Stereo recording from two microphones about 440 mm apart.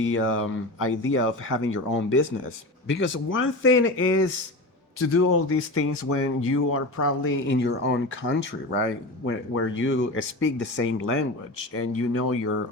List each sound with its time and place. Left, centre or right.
0.0 s speech: left